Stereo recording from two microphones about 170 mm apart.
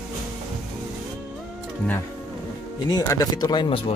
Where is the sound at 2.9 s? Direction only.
20° left (ahead or behind).